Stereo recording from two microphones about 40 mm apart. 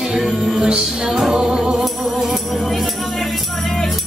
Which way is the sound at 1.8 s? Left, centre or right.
Centre.